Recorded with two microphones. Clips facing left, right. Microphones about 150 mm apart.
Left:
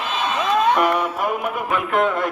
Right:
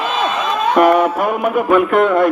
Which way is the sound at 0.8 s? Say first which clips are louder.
Right 8 dB; 60° right (ahead or behind).